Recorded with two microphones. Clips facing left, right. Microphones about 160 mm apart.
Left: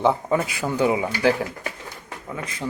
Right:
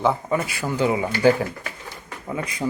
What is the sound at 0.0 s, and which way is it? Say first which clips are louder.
A man's voice: left 1 dB; 25° left (ahead or behind).